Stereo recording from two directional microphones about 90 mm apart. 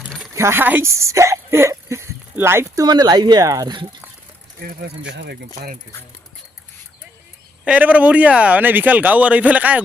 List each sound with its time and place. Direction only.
0.3 s speech: 30° right (ahead or behind)
0.9 s speech: 35° right (ahead or behind)
2.8 s speech: 50° right (ahead or behind)
7.6 s speech: 15° right (ahead or behind)